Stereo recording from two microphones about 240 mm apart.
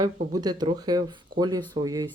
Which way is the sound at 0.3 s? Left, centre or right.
Centre.